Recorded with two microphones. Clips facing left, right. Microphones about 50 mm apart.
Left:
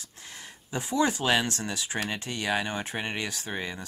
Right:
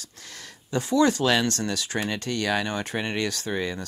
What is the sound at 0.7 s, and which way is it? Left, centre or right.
Speech, centre.